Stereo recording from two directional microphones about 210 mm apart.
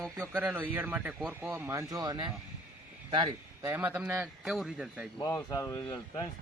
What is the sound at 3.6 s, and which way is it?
Speech, 10° right (ahead or behind).